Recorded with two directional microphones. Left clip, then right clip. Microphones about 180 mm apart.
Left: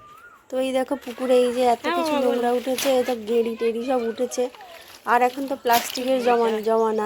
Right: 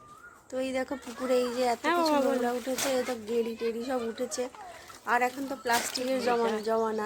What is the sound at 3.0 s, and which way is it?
Speech, 35° left (ahead or behind).